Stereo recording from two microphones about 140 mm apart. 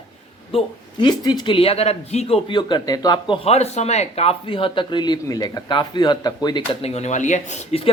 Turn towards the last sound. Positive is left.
turn(degrees=45)  # may be behind; listen again after turning